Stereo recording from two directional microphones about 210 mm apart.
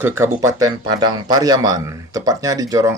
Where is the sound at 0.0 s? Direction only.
10° right (ahead or behind).